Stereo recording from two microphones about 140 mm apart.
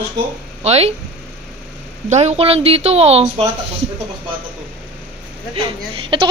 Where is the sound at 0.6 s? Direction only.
50° right (ahead or behind).